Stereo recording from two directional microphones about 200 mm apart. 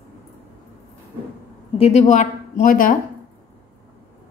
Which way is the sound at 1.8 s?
35° left (ahead or behind).